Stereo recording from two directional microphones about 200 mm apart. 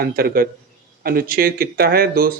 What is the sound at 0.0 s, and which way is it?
Speech, 50° right (ahead or behind).